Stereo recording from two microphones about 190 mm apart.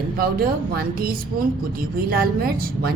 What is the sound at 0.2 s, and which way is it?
Speech, 55° right (ahead or behind).